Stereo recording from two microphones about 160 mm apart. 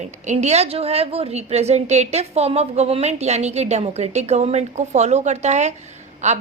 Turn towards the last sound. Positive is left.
turn(degrees=-45)  # may be behind; listen again after turning